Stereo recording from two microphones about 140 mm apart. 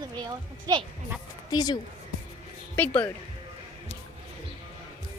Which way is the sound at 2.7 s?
10° left (ahead or behind).